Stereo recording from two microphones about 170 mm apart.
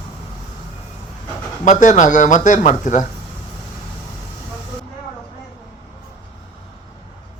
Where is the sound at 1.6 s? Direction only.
45° left (ahead or behind).